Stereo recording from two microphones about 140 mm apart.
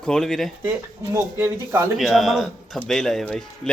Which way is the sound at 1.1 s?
20° right (ahead or behind).